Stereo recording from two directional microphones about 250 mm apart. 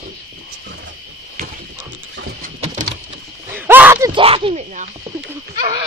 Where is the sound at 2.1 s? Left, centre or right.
Right.